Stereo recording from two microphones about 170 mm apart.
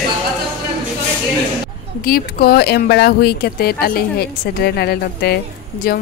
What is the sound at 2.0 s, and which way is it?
Speech, 60° left (ahead or behind).